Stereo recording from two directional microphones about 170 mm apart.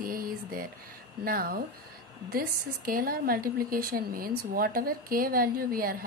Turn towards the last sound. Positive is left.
turn(degrees=-60)  # may be behind; listen again after turning